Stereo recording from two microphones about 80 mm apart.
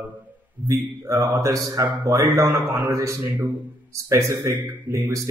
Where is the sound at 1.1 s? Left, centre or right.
Right.